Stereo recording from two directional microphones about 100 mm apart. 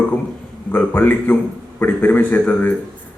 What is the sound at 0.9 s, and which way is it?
A man's voice, 20° left (ahead or behind).